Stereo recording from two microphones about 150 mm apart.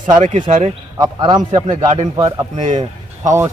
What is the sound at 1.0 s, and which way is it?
Speech, 30° right (ahead or behind).